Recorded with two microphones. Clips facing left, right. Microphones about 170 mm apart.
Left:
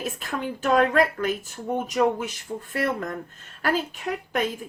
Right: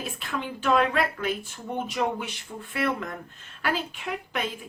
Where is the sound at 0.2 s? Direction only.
45° left (ahead or behind).